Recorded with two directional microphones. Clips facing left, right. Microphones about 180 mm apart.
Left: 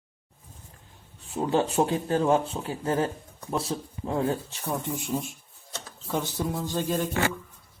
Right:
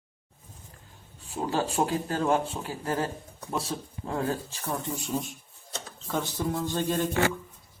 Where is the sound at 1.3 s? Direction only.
25° left (ahead or behind).